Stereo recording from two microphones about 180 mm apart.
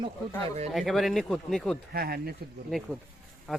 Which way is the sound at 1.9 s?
60° right (ahead or behind).